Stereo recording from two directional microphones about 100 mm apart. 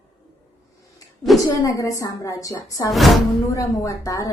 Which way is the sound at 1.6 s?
35° left (ahead or behind).